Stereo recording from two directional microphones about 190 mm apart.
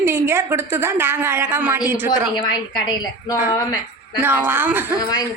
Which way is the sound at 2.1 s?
25° left (ahead or behind).